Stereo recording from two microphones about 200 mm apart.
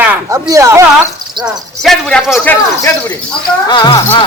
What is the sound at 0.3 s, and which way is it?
Speech, 15° right (ahead or behind).